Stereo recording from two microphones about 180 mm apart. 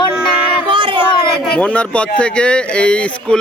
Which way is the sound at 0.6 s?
25° right (ahead or behind).